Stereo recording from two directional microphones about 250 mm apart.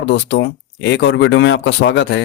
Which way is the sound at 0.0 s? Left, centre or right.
Left.